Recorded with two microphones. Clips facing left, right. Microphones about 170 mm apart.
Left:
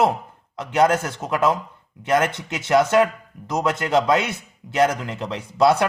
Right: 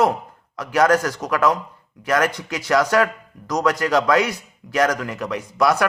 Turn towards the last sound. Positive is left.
turn(degrees=25)  # may be behind; listen again after turning